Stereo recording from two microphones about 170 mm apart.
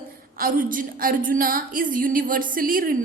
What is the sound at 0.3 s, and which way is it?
A woman's voice, 55° right (ahead or behind).